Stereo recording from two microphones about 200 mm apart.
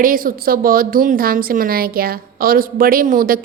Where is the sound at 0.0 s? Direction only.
45° right (ahead or behind).